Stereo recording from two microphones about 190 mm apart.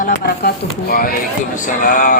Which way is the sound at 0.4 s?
50° left (ahead or behind).